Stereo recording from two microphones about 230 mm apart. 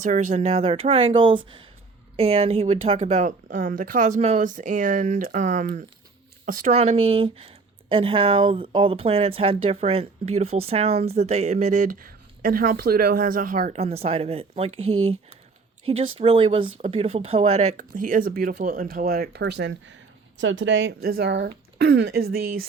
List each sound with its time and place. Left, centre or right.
0.0 s speech: right
15.9 s speech: right